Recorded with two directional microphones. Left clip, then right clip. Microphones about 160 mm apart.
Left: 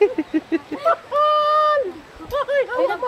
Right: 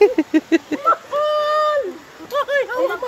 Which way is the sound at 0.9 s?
30° right (ahead or behind).